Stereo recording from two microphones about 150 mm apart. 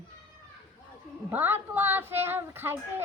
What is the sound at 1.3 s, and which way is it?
Speech, 15° right (ahead or behind).